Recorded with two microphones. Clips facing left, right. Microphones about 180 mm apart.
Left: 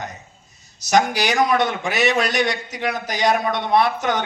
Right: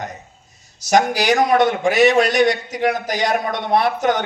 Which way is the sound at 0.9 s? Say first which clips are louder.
Right 3 dB; 45° right (ahead or behind).